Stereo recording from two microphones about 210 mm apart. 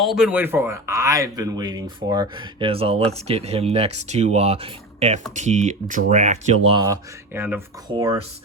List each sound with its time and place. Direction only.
0.0 s speech: centre (ahead or behind); by 6.6 s 30° right (ahead or behind)
6.7 s speech: 20° right (ahead or behind)
7.9 s speech: 20° right (ahead or behind)